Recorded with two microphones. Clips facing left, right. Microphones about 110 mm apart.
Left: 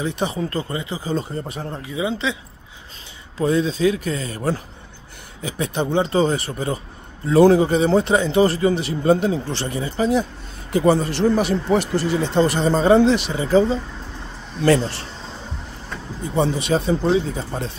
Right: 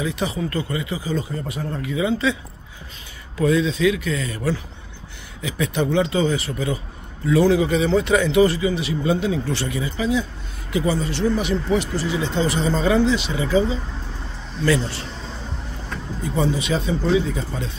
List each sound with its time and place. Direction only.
0.0 s a man's voice: 35° left (ahead or behind)
1.7 s speech: 20° left (ahead or behind)
3.3 s a man's voice: 35° left (ahead or behind)
13.0 s speech: 55° left (ahead or behind)
16.3 s a man's voice: 45° left (ahead or behind)